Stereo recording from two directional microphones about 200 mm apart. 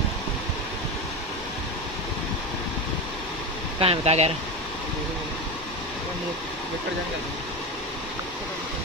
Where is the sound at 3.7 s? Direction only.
30° right (ahead or behind).